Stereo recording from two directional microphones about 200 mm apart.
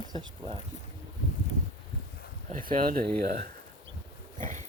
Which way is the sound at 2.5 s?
40° right (ahead or behind).